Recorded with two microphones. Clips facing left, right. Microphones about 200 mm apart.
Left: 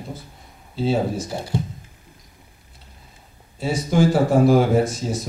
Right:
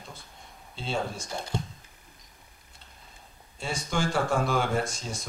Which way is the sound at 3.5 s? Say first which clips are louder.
Left 11 dB; 5° left (ahead or behind).